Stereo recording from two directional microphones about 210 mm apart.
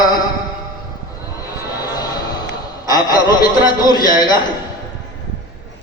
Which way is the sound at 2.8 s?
20° left (ahead or behind).